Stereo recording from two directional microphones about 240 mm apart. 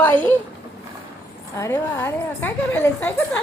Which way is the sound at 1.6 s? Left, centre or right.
Centre.